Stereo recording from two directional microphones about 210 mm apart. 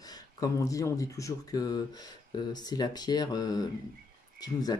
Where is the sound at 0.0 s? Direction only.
15° left (ahead or behind).